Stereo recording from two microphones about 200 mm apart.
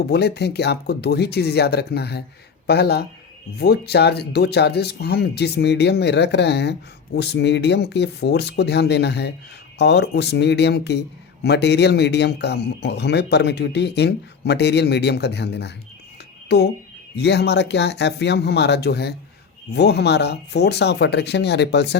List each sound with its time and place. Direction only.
0.1 s speech: 55° left (ahead or behind)